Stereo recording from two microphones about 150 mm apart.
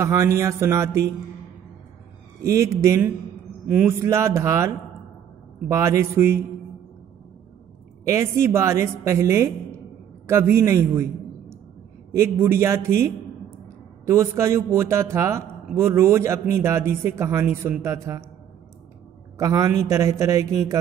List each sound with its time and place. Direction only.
0.0 s a man's voice: 20° right (ahead or behind)
2.4 s a man's voice: 20° right (ahead or behind)
8.0 s a man's voice: 20° right (ahead or behind)
19.3 s a man's voice: 20° right (ahead or behind)